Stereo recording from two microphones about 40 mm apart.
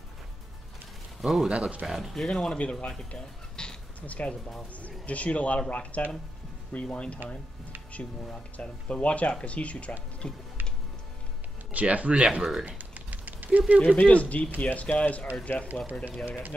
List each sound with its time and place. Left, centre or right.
1.2 s speech: centre
1.5 s speech: right
1.9 s speech: centre
2.2 s speech: centre
2.5 s speech: left
4.0 s speech: left
8.5 s speech: left
11.7 s speech: right
12.6 s typing: right
13.7 s speech: left
15.5 s speech: left